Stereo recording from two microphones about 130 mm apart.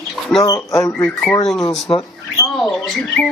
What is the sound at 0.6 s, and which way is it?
Speech, 25° left (ahead or behind).